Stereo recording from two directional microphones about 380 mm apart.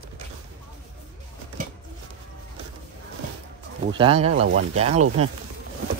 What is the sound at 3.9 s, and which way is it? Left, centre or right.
Speech, centre.